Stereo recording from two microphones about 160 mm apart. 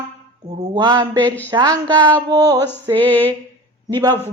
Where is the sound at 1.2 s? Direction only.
10° left (ahead or behind).